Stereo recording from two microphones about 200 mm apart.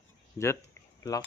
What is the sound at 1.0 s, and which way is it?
Speech, 15° left (ahead or behind).